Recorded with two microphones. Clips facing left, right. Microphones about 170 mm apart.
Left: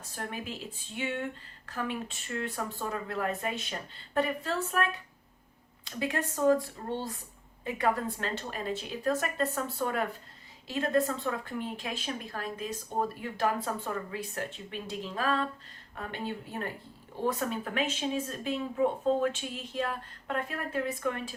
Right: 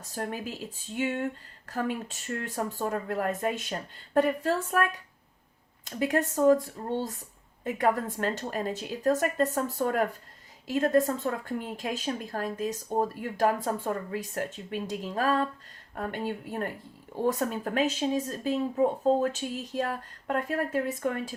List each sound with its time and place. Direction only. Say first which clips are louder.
0.0 s speech: right 4 dB; 40° right (ahead or behind)
5.8 s speech: right 5 dB; 45° right (ahead or behind)
17.2 s speech: right 3 dB; 45° right (ahead or behind)